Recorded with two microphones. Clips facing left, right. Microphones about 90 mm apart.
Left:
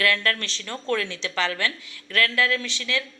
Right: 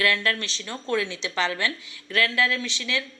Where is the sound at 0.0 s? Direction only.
20° right (ahead or behind).